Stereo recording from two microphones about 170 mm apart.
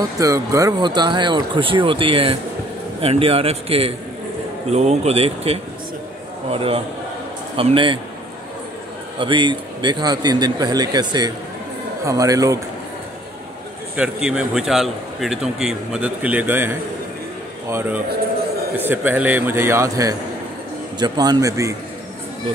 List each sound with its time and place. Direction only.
0.2 s speech: 20° right (ahead or behind)
9.2 s speech: 30° right (ahead or behind)
13.9 s a man's voice: 5° right (ahead or behind)